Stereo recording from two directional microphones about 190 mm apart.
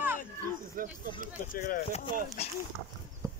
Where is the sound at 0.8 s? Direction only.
45° right (ahead or behind).